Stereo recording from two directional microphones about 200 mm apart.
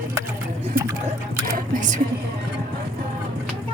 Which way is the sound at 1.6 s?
40° right (ahead or behind).